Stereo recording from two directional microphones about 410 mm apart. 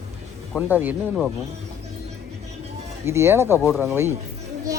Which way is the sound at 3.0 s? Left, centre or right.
Centre.